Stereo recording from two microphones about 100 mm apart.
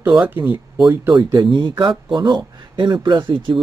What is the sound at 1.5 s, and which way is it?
Speech, 50° right (ahead or behind).